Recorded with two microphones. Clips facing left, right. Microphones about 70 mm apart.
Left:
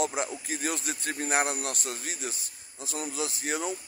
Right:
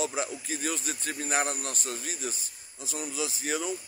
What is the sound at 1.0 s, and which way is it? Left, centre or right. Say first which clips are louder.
Speech: left 2 dB; left.